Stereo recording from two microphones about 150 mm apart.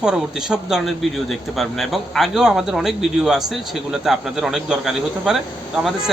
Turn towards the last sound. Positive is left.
turn(degrees=-5)  # may be behind; listen again after turning